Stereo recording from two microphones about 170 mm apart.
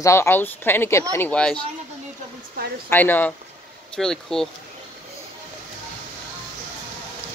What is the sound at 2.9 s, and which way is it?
Speech, 10° left (ahead or behind).